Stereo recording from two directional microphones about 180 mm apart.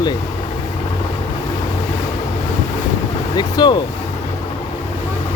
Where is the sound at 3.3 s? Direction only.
25° left (ahead or behind).